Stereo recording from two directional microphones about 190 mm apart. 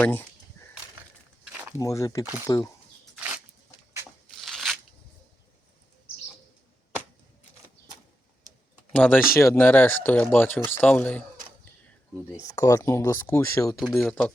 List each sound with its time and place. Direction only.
0.0 s speech: 10° left (ahead or behind)
0.6 s a sound: 15° left (ahead or behind)
1.8 s speech: 15° left (ahead or behind)
4.4 s crunch: centre (ahead or behind)
8.9 s speech: 10° left (ahead or behind)
12.4 s speech: 15° left (ahead or behind)